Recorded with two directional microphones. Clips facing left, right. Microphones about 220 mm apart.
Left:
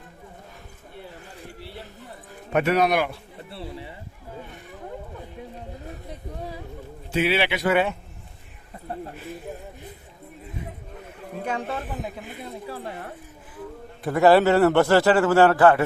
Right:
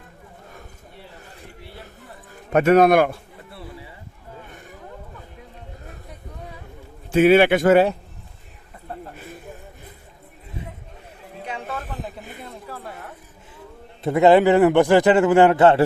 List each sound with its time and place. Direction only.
2.5 s a man's voice: 45° right (ahead or behind)
3.5 s a sound: 25° left (ahead or behind)
7.1 s a man's voice: 50° right (ahead or behind)
11.3 s a sound: 45° left (ahead or behind)
11.9 s speech: 10° left (ahead or behind)
14.0 s a man's voice: 20° right (ahead or behind)